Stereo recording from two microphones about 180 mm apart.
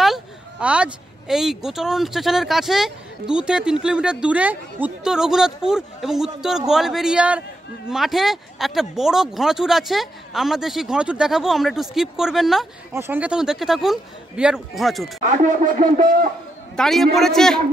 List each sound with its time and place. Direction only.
0.0 s speech: 5° right (ahead or behind)
12.9 s speech: 15° right (ahead or behind)
15.2 s speech: 45° right (ahead or behind)
16.7 s speech: centre (ahead or behind)